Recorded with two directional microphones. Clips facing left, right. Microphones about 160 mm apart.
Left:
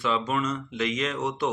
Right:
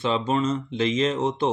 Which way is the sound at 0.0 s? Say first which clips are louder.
Right 3 dB; 30° right (ahead or behind).